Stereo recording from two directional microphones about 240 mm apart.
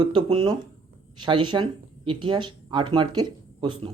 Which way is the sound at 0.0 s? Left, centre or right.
Right.